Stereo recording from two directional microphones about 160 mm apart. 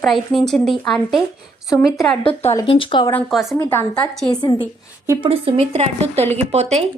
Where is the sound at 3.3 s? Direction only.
Centre (ahead or behind).